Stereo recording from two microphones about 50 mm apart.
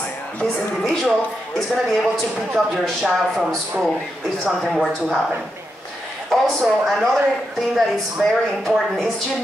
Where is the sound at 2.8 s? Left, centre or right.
Centre.